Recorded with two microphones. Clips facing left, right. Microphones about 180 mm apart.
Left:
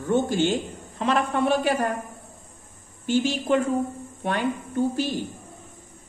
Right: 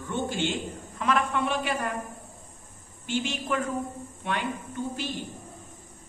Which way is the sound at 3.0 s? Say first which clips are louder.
Left 7 dB; 40° left (ahead or behind).